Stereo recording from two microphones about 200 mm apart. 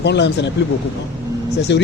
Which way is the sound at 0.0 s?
60° left (ahead or behind).